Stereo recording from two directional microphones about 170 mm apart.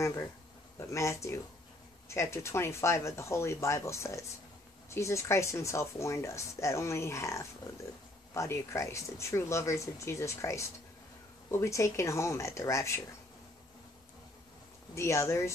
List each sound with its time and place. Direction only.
0.7 s speech: 15° left (ahead or behind)
15.0 s speech: 15° left (ahead or behind)